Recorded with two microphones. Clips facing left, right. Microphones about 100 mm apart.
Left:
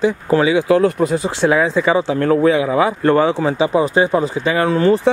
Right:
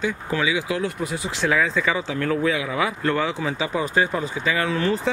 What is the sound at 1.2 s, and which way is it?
Speech, 30° left (ahead or behind).